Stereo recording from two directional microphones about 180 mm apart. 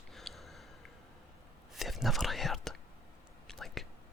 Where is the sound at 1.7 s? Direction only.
Centre (ahead or behind).